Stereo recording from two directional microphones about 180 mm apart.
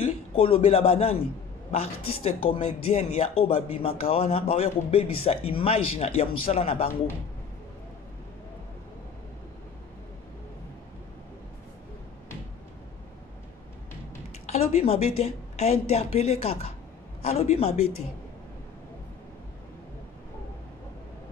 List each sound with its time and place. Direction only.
0.0 s a man's voice: 30° left (ahead or behind)
14.4 s speech: 40° left (ahead or behind)